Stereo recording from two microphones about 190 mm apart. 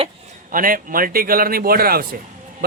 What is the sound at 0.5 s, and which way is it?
A man's voice, 45° right (ahead or behind).